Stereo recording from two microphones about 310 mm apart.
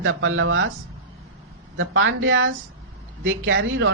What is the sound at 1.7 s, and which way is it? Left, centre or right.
Speech, right.